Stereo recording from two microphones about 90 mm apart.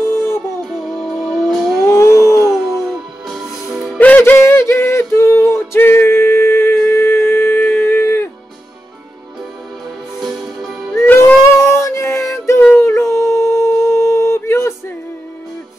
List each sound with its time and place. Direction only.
0.0 s music: 25° left (ahead or behind)
0.9 s music: 5° right (ahead or behind)
1.9 s howl: 30° left (ahead or behind)
2.5 s music: 5° right (ahead or behind)
4.0 s a sound: 20° left (ahead or behind)
10.2 s music: 5° right (ahead or behind)
11.2 s music: 25° left (ahead or behind)
12.7 s howl: 30° left (ahead or behind)